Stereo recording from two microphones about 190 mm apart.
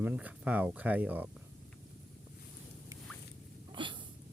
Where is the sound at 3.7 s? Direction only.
25° right (ahead or behind).